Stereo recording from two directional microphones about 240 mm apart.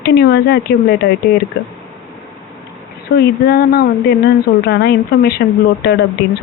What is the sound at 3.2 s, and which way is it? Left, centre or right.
A woman's voice, left.